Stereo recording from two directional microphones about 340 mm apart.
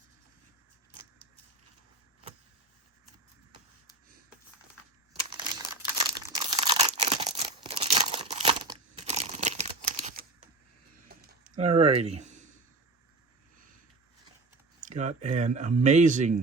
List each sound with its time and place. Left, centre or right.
5.4 s crumpling: centre
11.1 s a sound: right
14.8 s typing: right
15.4 s speech: right